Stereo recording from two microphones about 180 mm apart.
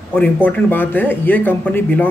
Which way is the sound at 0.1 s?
10° left (ahead or behind).